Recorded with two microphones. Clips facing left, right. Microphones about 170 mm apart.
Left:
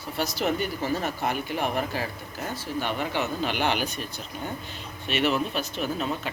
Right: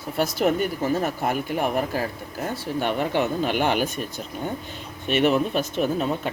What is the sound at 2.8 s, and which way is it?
Speech, 55° right (ahead or behind).